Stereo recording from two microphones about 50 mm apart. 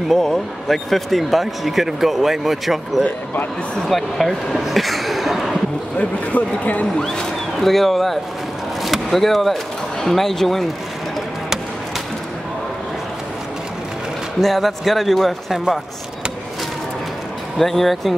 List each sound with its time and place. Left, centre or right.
0.1 s speech: centre
5.9 s speech: left
7.0 s speech: centre
14.4 s speech: centre
17.6 s speech: centre